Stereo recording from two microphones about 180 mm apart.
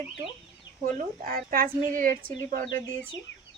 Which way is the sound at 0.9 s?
50° right (ahead or behind).